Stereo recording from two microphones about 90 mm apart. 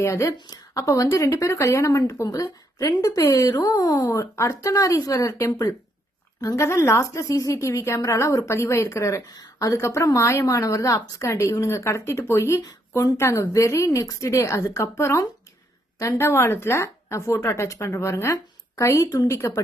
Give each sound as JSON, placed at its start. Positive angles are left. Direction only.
{"t": 0.0, "sound": "a woman's voice", "side_deg": 35}
{"t": 0.3, "sound": "speech", "side_deg": 50}
{"t": 0.8, "sound": "a woman's voice", "side_deg": 35}
{"t": 6.4, "sound": "a woman's voice", "side_deg": 35}